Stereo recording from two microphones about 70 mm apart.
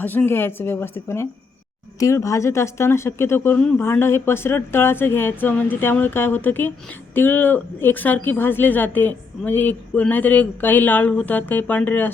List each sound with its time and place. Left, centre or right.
0.0 s speech: left
2.0 s speech: left